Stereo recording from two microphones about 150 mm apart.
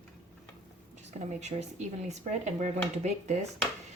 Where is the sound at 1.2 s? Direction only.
50° right (ahead or behind).